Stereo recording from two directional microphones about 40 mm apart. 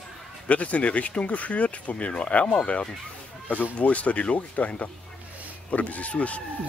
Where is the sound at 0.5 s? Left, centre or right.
Left.